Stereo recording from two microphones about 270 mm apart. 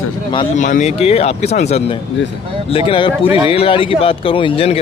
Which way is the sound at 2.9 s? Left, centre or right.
Centre.